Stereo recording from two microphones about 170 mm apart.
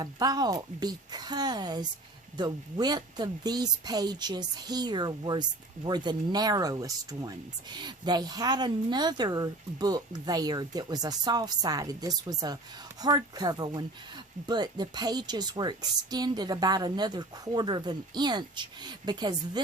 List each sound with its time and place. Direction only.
0.0 s a woman's voice: 20° right (ahead or behind)